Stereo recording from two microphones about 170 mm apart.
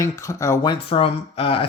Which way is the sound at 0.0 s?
20° left (ahead or behind).